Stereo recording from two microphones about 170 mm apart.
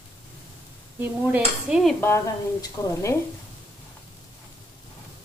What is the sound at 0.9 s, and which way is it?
Speech, 10° right (ahead or behind).